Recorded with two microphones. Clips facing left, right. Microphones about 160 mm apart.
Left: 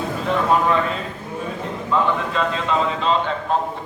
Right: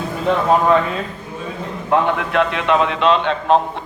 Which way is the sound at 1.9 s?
70° right (ahead or behind).